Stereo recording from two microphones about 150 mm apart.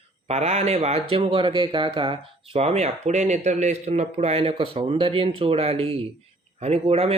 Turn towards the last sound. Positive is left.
turn(degrees=-40)  # may be behind; listen again after turning